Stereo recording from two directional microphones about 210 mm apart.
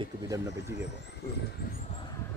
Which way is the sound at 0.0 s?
15° right (ahead or behind).